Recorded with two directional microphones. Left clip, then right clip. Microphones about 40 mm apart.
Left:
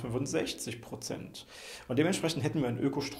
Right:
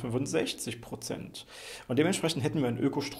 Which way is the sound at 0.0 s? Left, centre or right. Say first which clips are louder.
Right 2 dB; right.